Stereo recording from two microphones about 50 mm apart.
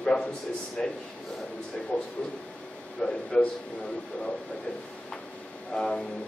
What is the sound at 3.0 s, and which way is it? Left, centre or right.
Speech, centre.